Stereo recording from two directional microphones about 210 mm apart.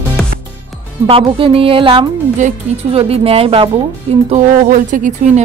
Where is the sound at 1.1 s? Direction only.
25° right (ahead or behind).